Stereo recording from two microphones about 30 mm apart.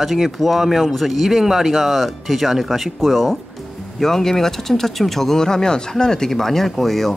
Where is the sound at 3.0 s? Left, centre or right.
Centre.